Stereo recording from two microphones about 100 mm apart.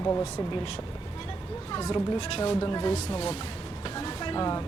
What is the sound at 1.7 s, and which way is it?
Speech, 40° left (ahead or behind).